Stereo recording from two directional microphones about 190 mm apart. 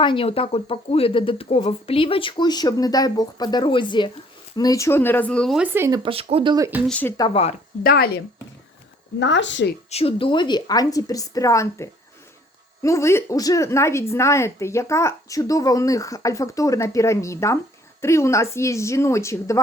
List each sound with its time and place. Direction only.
0.0 s a woman's voice: 25° left (ahead or behind); by 6.0 s 10° right (ahead or behind)
6.0 s speech: 30° right (ahead or behind)
6.8 s speech: 5° left (ahead or behind)
7.2 s a woman's voice: 30° left (ahead or behind)
7.9 s speech: 55° left (ahead or behind)
9.1 s speech: 70° left (ahead or behind)
9.9 s a woman's voice: 30° left (ahead or behind); by 19.6 s 15° left (ahead or behind)